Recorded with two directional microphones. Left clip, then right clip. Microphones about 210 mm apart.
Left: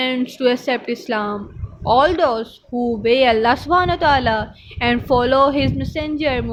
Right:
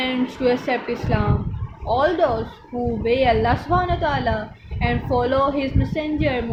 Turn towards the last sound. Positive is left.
turn(degrees=55)  # may be behind; listen again after turning